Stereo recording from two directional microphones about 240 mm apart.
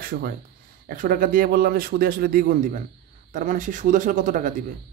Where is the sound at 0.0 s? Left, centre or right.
Right.